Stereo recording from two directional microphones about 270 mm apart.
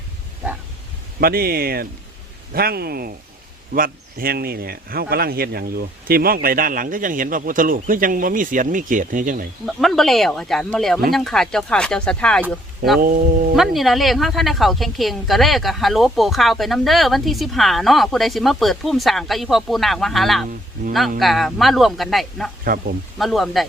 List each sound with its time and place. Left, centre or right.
1.2 s speech: right
9.6 s a woman's voice: centre
13.0 s speech: right
13.6 s a woman's voice: centre
22.6 s speech: right
23.1 s a woman's voice: centre